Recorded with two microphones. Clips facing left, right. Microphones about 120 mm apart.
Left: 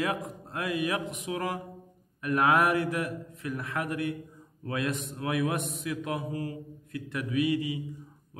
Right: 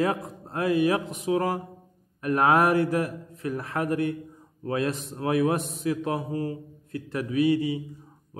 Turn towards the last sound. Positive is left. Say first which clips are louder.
# right 5 dB
turn(degrees=-35)  # may be behind; listen again after turning